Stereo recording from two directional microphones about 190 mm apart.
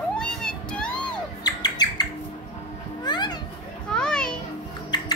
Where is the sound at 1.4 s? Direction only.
20° left (ahead or behind).